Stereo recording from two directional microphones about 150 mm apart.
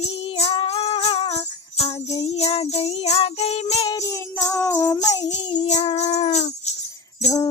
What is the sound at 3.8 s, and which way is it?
Music, 25° left (ahead or behind).